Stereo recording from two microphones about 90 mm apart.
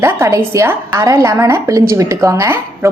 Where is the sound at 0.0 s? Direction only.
30° right (ahead or behind).